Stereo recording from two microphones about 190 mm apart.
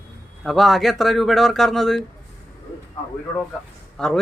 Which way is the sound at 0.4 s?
Centre (ahead or behind).